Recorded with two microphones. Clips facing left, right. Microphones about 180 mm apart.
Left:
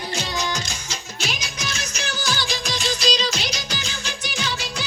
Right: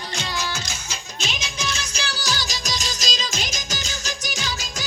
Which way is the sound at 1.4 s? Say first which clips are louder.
Right 1 dB; 30° right (ahead or behind).